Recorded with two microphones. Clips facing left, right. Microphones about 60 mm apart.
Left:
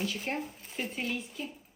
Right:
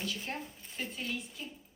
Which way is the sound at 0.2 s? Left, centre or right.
Left.